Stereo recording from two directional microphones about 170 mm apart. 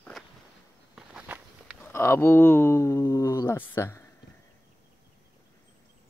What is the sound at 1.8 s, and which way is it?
Speech, 15° left (ahead or behind).